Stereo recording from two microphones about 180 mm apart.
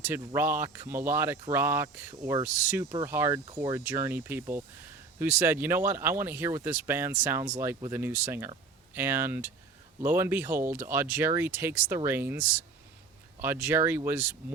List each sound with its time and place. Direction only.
0.3 s speech: 10° right (ahead or behind)